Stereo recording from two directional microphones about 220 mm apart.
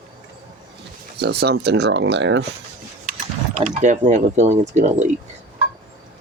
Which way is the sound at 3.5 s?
35° right (ahead or behind).